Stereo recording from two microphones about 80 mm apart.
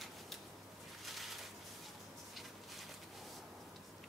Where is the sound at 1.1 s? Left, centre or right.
Centre.